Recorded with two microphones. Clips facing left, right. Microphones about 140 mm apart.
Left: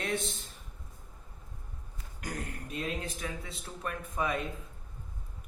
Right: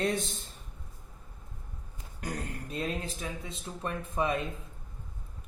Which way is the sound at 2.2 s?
30° right (ahead or behind).